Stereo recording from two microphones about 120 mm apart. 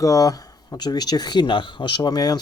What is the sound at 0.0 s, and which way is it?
Speech, 30° left (ahead or behind).